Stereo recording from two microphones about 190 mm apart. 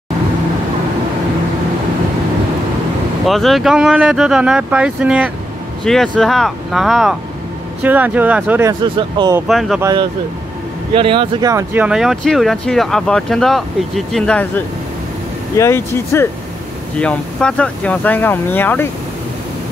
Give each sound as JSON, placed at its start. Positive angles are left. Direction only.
{"t": 3.3, "sound": "speech", "side_deg": 0}
{"t": 8.8, "sound": "speech", "side_deg": -25}
{"t": 9.5, "sound": "speech", "side_deg": 0}
{"t": 11.0, "sound": "speech", "side_deg": -25}
{"t": 11.5, "sound": "speech", "side_deg": -10}